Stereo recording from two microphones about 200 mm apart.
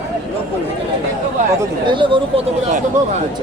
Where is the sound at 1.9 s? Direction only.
25° right (ahead or behind).